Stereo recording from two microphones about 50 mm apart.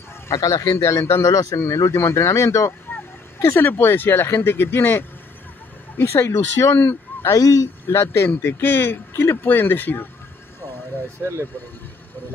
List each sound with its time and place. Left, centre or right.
0.3 s a man's voice: left
3.5 s speech: left
6.0 s a man's voice: left
7.2 s a man's voice: left
8.3 s speech: left